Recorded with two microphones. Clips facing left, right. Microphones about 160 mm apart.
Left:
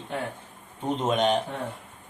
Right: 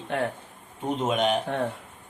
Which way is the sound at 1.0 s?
5° right (ahead or behind).